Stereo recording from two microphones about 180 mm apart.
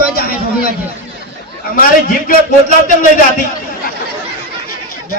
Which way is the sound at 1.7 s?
55° left (ahead or behind).